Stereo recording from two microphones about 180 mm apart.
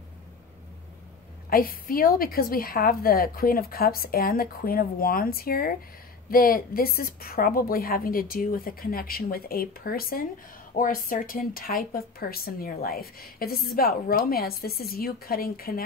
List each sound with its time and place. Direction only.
1.5 s a woman's voice: 55° left (ahead or behind)